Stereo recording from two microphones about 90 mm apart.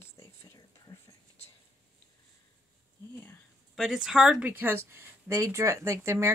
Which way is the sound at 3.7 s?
5° right (ahead or behind).